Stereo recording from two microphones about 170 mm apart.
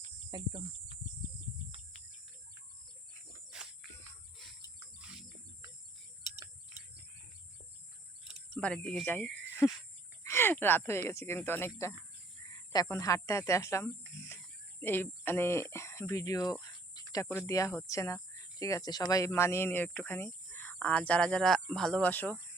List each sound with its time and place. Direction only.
0.3 s speech: 25° right (ahead or behind)
3.5 s cricket: 5° right (ahead or behind)
8.4 s speech: 5° left (ahead or behind)
10.2 s speech: 15° left (ahead or behind)
12.5 s speech: 25° left (ahead or behind)